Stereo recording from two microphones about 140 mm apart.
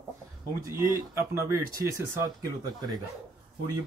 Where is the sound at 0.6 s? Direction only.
20° right (ahead or behind).